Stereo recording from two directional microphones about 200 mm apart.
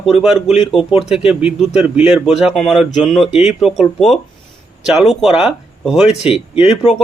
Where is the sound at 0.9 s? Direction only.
Centre (ahead or behind).